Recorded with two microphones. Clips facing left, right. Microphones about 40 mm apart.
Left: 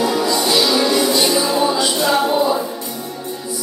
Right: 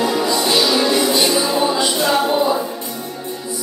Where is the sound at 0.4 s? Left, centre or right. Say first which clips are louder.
Even; right.